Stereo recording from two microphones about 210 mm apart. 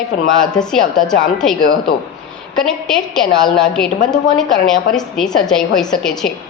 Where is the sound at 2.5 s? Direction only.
5° left (ahead or behind).